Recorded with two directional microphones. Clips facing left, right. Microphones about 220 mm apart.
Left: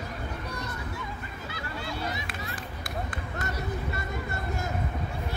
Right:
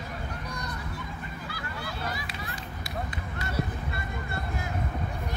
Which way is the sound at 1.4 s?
25° left (ahead or behind).